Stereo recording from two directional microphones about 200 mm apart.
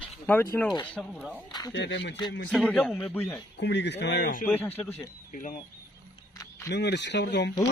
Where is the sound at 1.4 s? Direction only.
20° left (ahead or behind).